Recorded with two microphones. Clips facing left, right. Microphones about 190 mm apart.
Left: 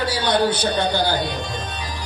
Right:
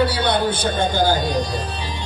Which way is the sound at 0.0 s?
55° right (ahead or behind).